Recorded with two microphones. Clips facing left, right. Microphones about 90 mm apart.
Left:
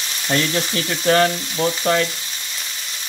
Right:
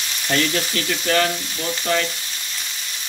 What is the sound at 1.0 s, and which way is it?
Frying, 35° left (ahead or behind).